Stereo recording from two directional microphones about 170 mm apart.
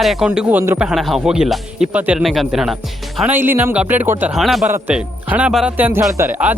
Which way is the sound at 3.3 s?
10° right (ahead or behind).